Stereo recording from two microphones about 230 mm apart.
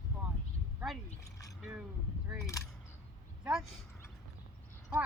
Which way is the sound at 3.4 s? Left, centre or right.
Centre.